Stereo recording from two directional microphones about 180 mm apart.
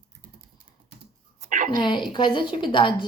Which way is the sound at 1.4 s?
45° right (ahead or behind).